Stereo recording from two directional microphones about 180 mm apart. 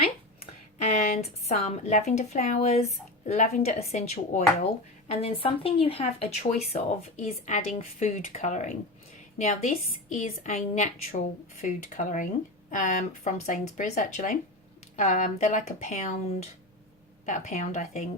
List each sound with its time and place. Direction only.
0.8 s speech: 40° left (ahead or behind)